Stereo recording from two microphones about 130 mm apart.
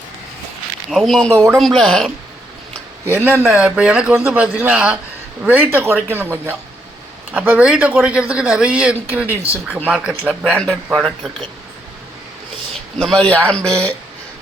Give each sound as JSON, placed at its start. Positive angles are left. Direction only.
{"t": 0.9, "sound": "speech", "side_deg": 0}
{"t": 1.3, "sound": "speech", "side_deg": -20}
{"t": 1.5, "sound": "speech", "side_deg": 0}
{"t": 3.4, "sound": "speech", "side_deg": -5}
{"t": 13.0, "sound": "a man's voice", "side_deg": 5}